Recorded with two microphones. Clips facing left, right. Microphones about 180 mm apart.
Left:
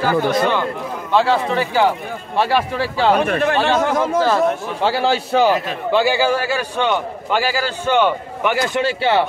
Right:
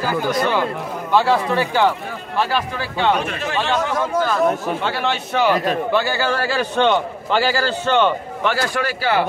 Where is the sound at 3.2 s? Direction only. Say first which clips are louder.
Left 6 dB; 55° left (ahead or behind).